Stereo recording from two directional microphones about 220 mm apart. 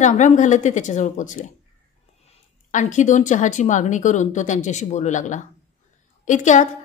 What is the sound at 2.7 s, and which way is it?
A woman's voice, 35° left (ahead or behind).